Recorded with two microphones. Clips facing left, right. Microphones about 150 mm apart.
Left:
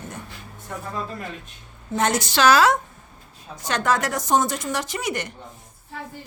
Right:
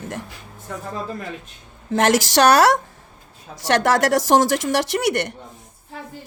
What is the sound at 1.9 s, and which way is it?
A woman's voice, 90° right.